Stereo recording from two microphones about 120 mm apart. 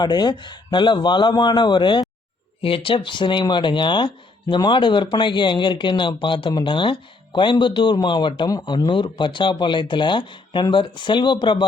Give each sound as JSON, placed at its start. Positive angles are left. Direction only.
{"t": 0.0, "sound": "speech", "side_deg": 35}